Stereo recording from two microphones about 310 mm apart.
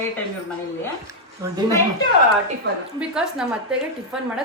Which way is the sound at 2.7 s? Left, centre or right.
Right.